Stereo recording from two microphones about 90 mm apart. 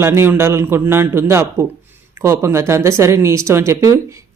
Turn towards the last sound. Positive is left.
turn(degrees=-35)  # may be behind; listen again after turning